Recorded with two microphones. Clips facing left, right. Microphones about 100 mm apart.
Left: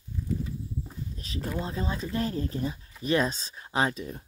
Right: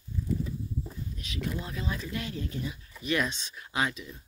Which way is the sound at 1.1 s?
35° left (ahead or behind).